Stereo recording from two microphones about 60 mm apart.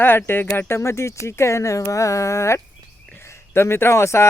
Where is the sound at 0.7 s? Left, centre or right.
Left.